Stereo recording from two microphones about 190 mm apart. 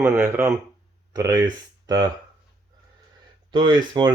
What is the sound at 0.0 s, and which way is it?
Speech, 10° right (ahead or behind).